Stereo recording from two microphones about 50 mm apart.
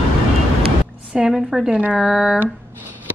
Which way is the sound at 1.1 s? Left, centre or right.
Centre.